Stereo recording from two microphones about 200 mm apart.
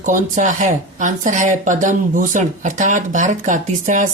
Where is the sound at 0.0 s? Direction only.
40° right (ahead or behind).